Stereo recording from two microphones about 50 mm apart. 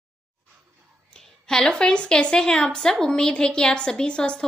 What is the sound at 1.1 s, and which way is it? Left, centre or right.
A woman's voice, centre.